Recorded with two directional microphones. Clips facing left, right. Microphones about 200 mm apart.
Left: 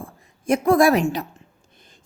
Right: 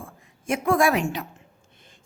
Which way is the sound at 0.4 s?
40° left (ahead or behind).